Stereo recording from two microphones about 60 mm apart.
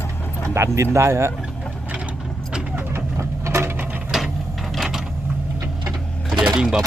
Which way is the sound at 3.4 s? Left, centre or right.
Right.